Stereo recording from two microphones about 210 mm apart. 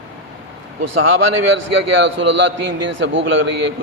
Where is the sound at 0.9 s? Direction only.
70° right (ahead or behind).